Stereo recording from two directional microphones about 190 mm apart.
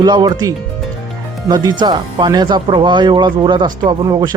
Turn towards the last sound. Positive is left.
turn(degrees=-20)  # may be behind; listen again after turning